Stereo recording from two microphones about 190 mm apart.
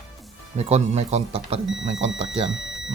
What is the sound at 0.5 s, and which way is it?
Speech, 35° right (ahead or behind).